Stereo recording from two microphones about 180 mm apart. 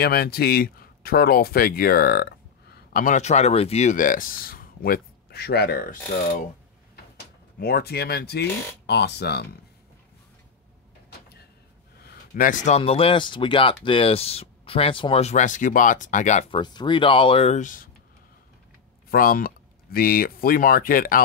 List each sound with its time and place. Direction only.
0.0 s speech: 60° left (ahead or behind)
2.9 s speech: 45° left (ahead or behind)
7.5 s speech: 60° left (ahead or behind)
12.0 s speech: 55° left (ahead or behind); by 16.5 s 40° left (ahead or behind)
16.5 s speech: 25° left (ahead or behind); by 17.8 s 45° left (ahead or behind)
19.0 s speech: 55° left (ahead or behind)